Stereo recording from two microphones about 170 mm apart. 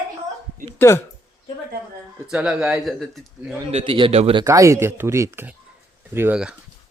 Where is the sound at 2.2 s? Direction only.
5° right (ahead or behind).